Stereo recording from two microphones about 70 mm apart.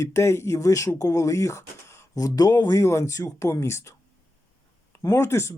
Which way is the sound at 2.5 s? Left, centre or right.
Left.